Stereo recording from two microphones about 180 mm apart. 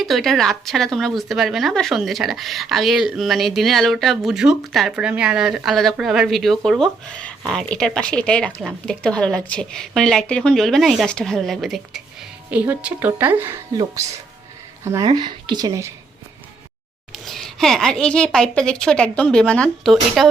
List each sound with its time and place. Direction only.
0.0 s speech: centre (ahead or behind); by 15.9 s 20° right (ahead or behind)
17.2 s speech: centre (ahead or behind)